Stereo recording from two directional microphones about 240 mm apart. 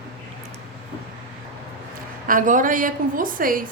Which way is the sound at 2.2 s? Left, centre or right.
Right.